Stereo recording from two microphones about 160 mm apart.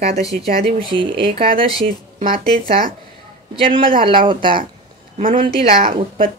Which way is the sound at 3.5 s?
35° right (ahead or behind).